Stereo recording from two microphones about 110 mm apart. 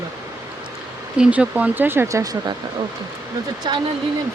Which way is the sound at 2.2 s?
35° right (ahead or behind).